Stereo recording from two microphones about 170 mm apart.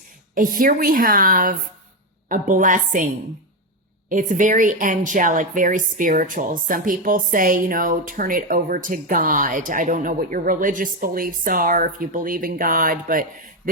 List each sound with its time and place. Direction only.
0.3 s a woman's voice: 55° right (ahead or behind)
4.1 s a woman's voice: 50° right (ahead or behind)